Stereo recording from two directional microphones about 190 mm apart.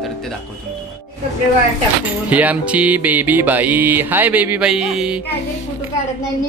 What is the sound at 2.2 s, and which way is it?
Music, 10° right (ahead or behind).